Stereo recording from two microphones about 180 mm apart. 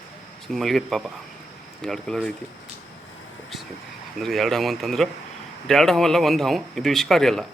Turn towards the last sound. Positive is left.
turn(degrees=0)  # may be behind; listen again after turning